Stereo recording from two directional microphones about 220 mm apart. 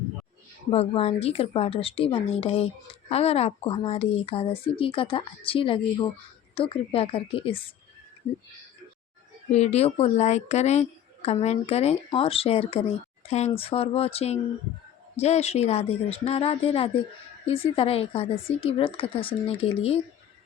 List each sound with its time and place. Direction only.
0.7 s a woman's voice: 25° left (ahead or behind)
9.5 s a woman's voice: 30° left (ahead or behind)